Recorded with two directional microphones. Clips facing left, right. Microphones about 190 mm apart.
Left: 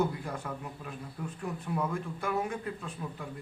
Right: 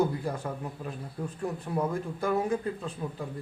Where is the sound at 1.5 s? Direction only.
35° right (ahead or behind).